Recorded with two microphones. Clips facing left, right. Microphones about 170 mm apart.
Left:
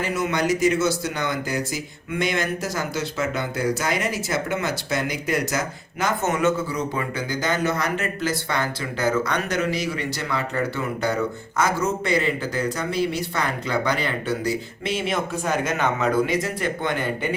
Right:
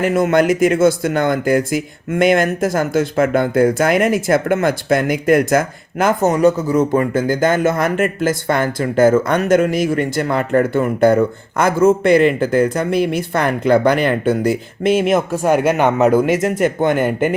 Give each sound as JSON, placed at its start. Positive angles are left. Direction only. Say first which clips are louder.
{"t": 0.0, "sound": "speech", "louder": "right 10 dB", "side_deg": -50}
{"t": 6.2, "sound": "speech", "louder": "right 8 dB", "side_deg": -35}
{"t": 15.6, "sound": "speech", "louder": "right 9 dB", "side_deg": -60}